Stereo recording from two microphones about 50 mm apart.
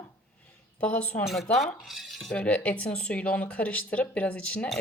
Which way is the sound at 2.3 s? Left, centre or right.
Left.